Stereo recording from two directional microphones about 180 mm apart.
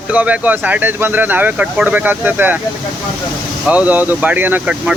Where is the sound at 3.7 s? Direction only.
10° right (ahead or behind).